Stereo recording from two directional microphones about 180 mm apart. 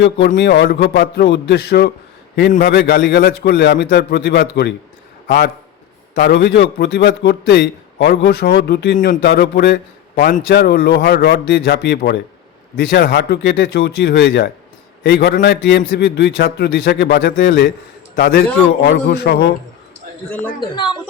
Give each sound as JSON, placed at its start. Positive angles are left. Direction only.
{"t": 0.3, "sound": "a man's voice", "side_deg": 65}
{"t": 6.1, "sound": "a man's voice", "side_deg": 60}
{"t": 20.6, "sound": "a woman's voice", "side_deg": 25}